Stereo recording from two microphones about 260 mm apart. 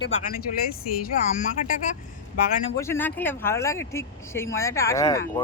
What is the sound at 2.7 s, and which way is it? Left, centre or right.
Speech, centre.